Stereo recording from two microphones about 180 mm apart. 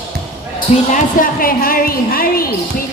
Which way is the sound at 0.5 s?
50° left (ahead or behind).